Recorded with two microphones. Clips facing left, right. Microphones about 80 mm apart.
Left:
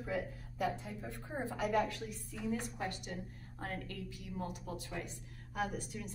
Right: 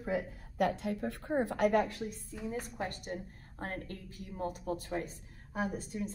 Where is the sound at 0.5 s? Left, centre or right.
Right.